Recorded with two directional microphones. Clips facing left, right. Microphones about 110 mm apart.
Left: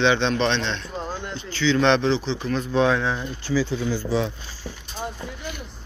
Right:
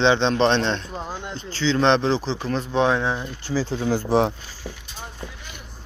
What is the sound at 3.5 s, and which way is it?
Speech, 45° right (ahead or behind).